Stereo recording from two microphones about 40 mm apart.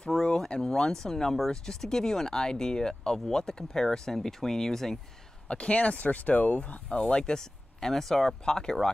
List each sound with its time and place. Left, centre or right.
0.0 s a sound: centre
0.9 s speech: centre
5.5 s speech: left
6.6 s speech: left